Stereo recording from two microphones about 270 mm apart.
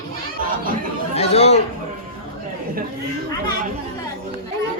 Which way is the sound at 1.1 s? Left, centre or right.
Left.